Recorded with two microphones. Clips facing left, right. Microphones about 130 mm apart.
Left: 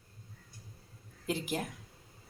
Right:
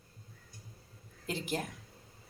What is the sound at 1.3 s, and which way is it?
Speech, 5° left (ahead or behind).